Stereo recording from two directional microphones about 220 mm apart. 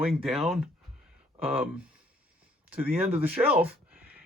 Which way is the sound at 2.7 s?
5° right (ahead or behind).